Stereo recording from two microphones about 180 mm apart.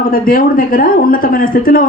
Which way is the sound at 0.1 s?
50° left (ahead or behind).